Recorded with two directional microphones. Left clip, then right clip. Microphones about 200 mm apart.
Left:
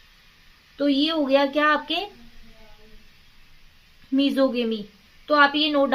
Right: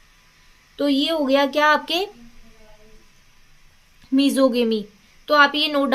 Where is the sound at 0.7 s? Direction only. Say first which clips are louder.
Right 2 dB; 40° right (ahead or behind).